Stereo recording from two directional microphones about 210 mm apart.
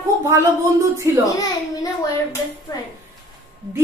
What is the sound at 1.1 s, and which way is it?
Speech, 15° right (ahead or behind).